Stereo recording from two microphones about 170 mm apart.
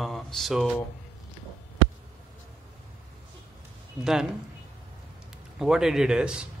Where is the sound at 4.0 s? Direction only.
5° right (ahead or behind).